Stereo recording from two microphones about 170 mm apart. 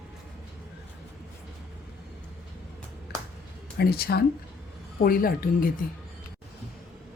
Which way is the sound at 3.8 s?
65° left (ahead or behind).